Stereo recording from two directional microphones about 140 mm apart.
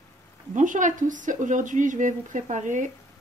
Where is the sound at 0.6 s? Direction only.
65° right (ahead or behind).